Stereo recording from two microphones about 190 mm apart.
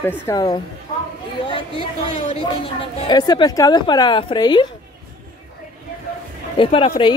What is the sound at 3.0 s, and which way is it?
Speech, 20° left (ahead or behind).